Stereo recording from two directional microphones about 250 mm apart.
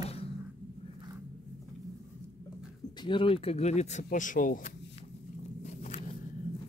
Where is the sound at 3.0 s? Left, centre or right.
Centre.